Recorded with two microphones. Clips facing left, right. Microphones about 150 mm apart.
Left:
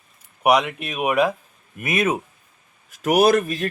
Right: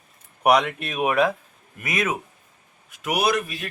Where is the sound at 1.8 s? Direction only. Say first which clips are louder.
Left 4 dB; 25° left (ahead or behind).